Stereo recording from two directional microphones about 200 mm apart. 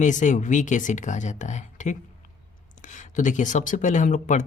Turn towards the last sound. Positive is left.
turn(degrees=40)  # may be behind; listen again after turning